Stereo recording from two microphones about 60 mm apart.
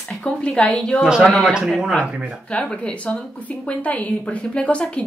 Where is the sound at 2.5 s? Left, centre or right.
Centre.